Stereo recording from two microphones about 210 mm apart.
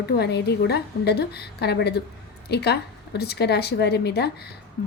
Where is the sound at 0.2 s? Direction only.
50° left (ahead or behind).